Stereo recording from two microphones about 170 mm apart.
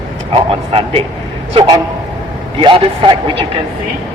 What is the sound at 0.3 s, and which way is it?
A man's voice, 35° right (ahead or behind).